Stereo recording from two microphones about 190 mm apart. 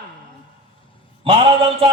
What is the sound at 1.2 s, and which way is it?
Speech, 30° right (ahead or behind).